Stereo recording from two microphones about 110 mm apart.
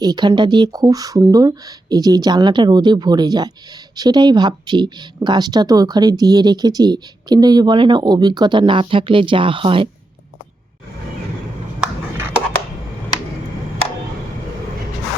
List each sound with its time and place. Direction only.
0.0 s speech: 40° right (ahead or behind); by 9.9 s 55° right (ahead or behind)